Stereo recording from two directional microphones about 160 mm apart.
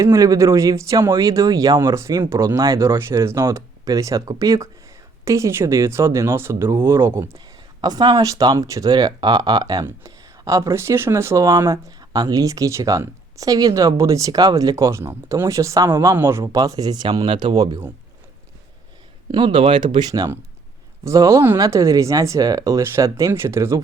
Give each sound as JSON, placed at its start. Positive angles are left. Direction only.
{"t": 0.0, "sound": "speech", "side_deg": -20}
{"t": 19.3, "sound": "speech", "side_deg": -30}